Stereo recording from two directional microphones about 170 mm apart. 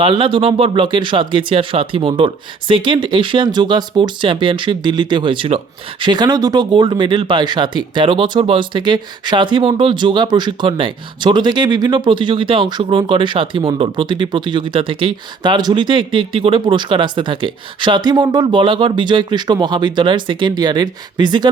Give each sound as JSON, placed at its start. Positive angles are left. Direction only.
{"t": 0.0, "sound": "speech", "side_deg": -30}